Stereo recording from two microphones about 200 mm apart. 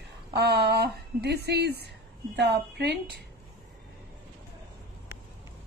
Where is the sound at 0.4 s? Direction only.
55° right (ahead or behind).